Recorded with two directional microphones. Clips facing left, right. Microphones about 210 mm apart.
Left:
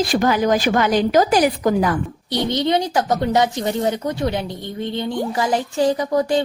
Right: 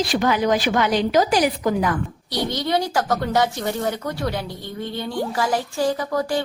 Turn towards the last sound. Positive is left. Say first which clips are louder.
# left 4 dB
turn(degrees=20)  # may be behind; listen again after turning